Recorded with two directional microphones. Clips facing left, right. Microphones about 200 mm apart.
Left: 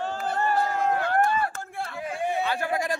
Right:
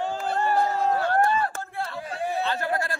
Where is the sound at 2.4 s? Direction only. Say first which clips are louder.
Even; 10° left (ahead or behind).